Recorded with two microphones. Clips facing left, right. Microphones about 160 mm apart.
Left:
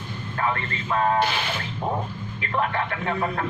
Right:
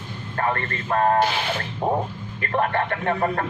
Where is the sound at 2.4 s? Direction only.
50° right (ahead or behind).